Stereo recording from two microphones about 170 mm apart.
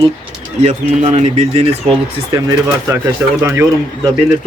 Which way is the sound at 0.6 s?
40° right (ahead or behind).